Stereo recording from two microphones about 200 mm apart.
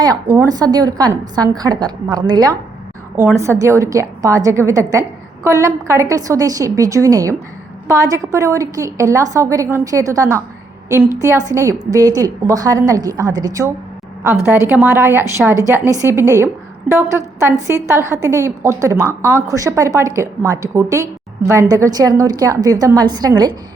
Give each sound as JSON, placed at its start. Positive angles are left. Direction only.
{"t": 0.0, "sound": "a woman's voice", "side_deg": -20}